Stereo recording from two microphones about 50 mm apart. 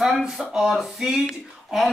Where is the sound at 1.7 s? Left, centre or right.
Centre.